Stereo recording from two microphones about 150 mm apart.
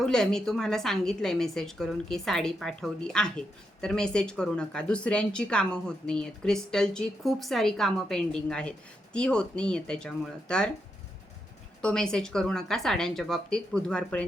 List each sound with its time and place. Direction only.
0.0 s a woman's voice: 5° left (ahead or behind)
11.8 s a woman's voice: 5° left (ahead or behind)